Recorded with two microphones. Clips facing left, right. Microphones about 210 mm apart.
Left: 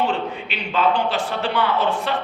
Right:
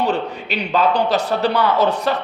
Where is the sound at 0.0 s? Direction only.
40° right (ahead or behind).